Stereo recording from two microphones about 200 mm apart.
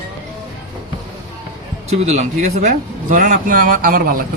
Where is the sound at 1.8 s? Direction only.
35° right (ahead or behind).